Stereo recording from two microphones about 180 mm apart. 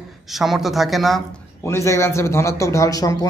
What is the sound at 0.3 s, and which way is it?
A man's voice, centre (ahead or behind).